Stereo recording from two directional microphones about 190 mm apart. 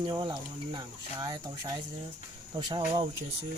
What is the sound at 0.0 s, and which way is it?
Speech, 25° right (ahead or behind).